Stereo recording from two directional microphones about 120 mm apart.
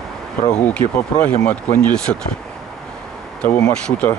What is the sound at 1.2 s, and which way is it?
Speech, 10° left (ahead or behind).